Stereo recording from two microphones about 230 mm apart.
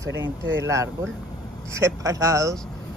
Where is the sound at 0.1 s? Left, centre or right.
Right.